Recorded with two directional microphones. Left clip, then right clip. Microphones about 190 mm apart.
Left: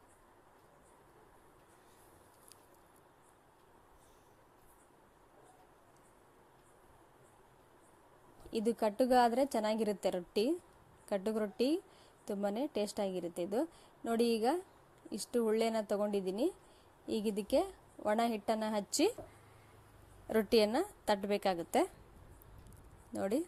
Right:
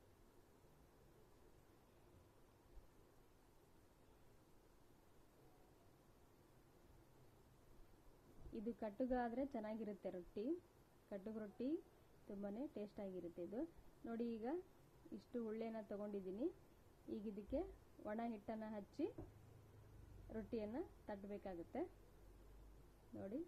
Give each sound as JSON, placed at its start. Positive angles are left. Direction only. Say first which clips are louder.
{"t": 8.5, "sound": "a woman's voice", "louder": "left 15 dB", "side_deg": 40}
{"t": 20.3, "sound": "a woman's voice", "louder": "left 19 dB", "side_deg": 55}